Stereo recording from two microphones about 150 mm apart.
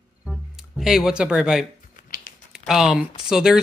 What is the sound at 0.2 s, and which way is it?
Music, centre (ahead or behind).